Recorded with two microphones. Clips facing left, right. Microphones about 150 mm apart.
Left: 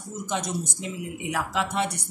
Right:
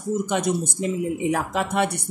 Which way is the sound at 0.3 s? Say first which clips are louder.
Right 6 dB; 60° right (ahead or behind).